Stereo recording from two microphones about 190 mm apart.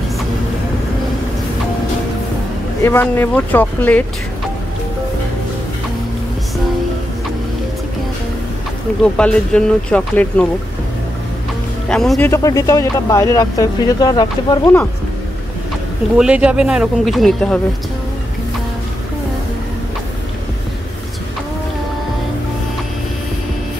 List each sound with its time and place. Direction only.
2.8 s speech: 10° left (ahead or behind)
9.0 s speech: 5° left (ahead or behind)
11.9 s speech: 5° left (ahead or behind)
12.3 s speech: 15° left (ahead or behind)
16.2 s speech: 5° right (ahead or behind)